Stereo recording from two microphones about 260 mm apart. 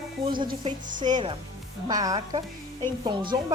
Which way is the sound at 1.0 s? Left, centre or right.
Centre.